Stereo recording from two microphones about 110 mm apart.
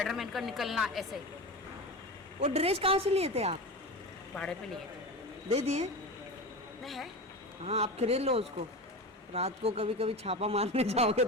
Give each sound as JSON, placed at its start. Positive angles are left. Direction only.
{"t": 0.0, "sound": "a woman's voice", "side_deg": 0}
{"t": 2.4, "sound": "a woman's voice", "side_deg": -70}
{"t": 4.4, "sound": "a man's voice", "side_deg": 10}
{"t": 5.5, "sound": "speech", "side_deg": -70}
{"t": 6.8, "sound": "a woman's voice", "side_deg": 0}
{"t": 7.6, "sound": "speech", "side_deg": -70}